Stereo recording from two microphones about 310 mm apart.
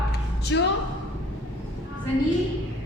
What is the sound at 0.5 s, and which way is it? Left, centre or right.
Speech, left.